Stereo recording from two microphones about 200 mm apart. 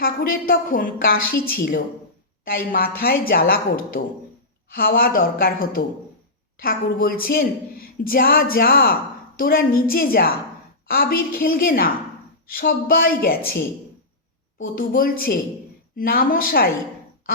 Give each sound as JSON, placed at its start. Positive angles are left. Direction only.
{"t": 0.0, "sound": "a woman's voice", "side_deg": 45}
{"t": 14.6, "sound": "a woman's voice", "side_deg": 45}